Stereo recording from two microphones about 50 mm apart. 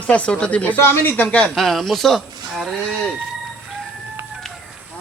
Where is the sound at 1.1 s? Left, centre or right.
Left.